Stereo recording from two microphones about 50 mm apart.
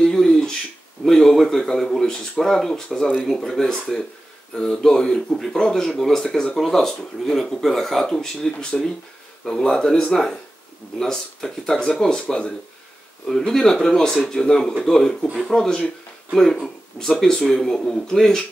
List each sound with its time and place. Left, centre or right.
0.0 s a sound: centre
2.3 s speech: centre
8.5 s speech: centre
9.4 s speech: centre